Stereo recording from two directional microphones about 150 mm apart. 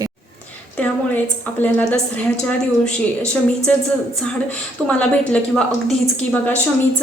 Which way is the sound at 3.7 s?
10° left (ahead or behind).